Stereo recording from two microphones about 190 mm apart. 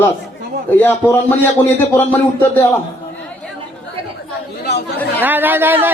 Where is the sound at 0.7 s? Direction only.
10° left (ahead or behind).